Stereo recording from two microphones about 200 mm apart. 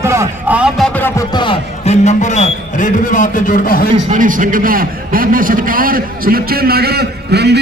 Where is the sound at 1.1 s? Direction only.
25° left (ahead or behind); by 3.9 s 45° left (ahead or behind).